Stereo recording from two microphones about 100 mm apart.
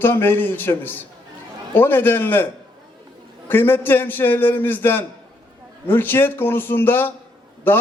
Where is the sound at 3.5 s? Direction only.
20° left (ahead or behind).